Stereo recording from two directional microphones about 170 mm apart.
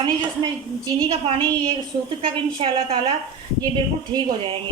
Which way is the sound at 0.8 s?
25° right (ahead or behind).